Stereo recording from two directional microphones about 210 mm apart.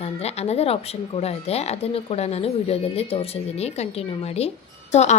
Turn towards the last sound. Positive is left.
turn(degrees=30)  # may be behind; listen again after turning